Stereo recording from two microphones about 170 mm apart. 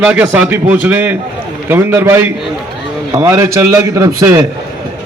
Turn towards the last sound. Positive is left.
turn(degrees=-20)  # may be behind; listen again after turning